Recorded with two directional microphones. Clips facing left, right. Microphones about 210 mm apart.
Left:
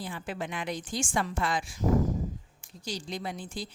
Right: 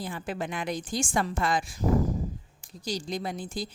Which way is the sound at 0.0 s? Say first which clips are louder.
Right 3 dB; 45° right (ahead or behind).